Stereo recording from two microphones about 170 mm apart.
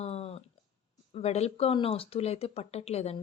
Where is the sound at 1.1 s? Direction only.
40° left (ahead or behind).